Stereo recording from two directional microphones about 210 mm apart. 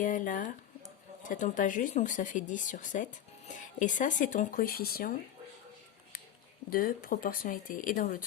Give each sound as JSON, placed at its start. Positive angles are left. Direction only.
{"t": 0.0, "sound": "speech", "side_deg": 40}
{"t": 6.7, "sound": "speech", "side_deg": 40}